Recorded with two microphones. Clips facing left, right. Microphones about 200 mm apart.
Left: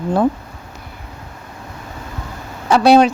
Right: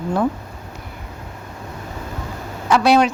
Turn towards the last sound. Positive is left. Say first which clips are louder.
# left 4 dB
turn(degrees=30)  # may be behind; listen again after turning